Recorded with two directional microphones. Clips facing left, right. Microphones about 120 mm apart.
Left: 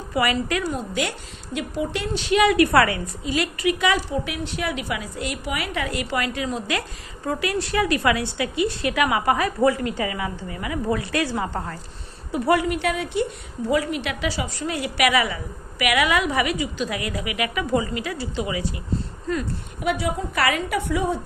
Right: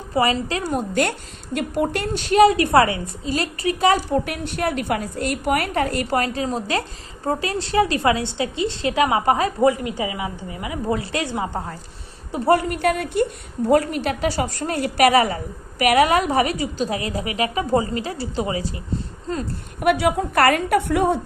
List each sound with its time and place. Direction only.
0.1 s a woman's voice: 30° right (ahead or behind)
0.7 s a woman's voice: 55° right (ahead or behind); by 3.0 s 25° right (ahead or behind)
3.3 s a woman's voice: 35° right (ahead or behind)
4.1 s a woman's voice: 50° right (ahead or behind); by 11.7 s 15° right (ahead or behind)
12.4 s a woman's voice: 40° right (ahead or behind)
19.8 s a woman's voice: 65° right (ahead or behind)